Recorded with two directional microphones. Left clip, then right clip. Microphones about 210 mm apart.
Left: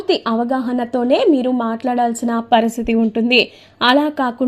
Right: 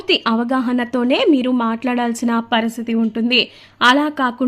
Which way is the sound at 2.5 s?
5° left (ahead or behind).